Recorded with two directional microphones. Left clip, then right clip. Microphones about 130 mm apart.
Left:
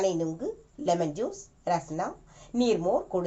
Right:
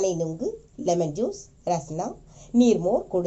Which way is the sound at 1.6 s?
40° right (ahead or behind).